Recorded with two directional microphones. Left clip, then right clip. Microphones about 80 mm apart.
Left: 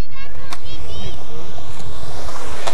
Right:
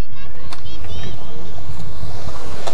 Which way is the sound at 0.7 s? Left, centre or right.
Left.